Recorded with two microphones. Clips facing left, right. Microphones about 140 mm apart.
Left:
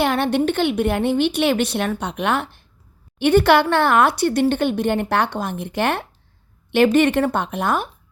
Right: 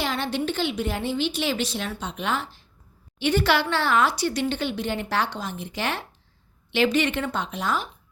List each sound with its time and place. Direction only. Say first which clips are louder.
0.0 s a woman's voice: left 8 dB; 60° left (ahead or behind)